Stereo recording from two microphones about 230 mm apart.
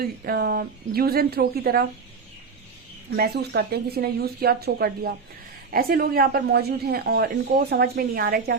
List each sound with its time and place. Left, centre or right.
0.0 s speech: right
3.1 s speech: right